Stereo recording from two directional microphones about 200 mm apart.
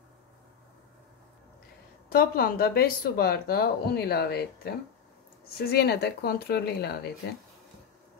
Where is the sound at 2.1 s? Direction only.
50° left (ahead or behind).